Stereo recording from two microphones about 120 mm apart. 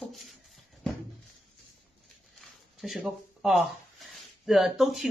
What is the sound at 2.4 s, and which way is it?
Speech, centre (ahead or behind).